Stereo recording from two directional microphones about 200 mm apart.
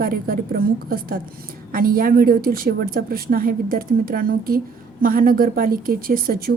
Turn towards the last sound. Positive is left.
turn(degrees=-50)  # may be behind; listen again after turning